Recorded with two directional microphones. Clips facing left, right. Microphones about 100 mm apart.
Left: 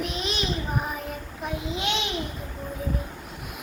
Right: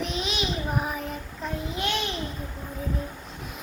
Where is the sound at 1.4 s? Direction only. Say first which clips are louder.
Left 1 dB; 20° left (ahead or behind).